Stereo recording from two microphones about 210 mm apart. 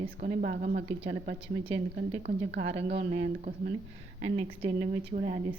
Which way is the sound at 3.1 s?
30° right (ahead or behind).